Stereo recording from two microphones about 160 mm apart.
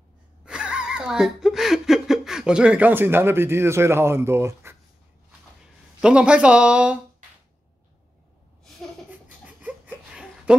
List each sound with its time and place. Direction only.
0.5 s speech: 5° right (ahead or behind)
5.9 s speech: 5° right (ahead or behind)
9.5 s a sound: 10° right (ahead or behind)